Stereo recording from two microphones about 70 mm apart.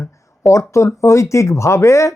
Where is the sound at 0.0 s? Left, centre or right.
Left.